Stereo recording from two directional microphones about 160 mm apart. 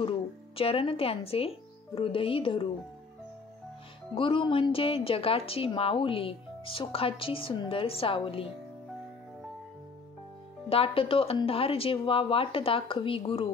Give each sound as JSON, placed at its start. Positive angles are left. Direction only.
{"t": 0.6, "sound": "a woman's voice", "side_deg": 35}
{"t": 4.1, "sound": "a woman's voice", "side_deg": 35}
{"t": 10.7, "sound": "a woman's voice", "side_deg": 35}